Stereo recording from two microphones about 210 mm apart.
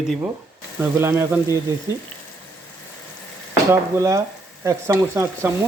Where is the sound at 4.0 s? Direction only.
15° right (ahead or behind).